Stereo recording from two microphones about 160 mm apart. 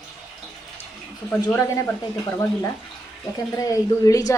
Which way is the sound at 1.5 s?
20° left (ahead or behind).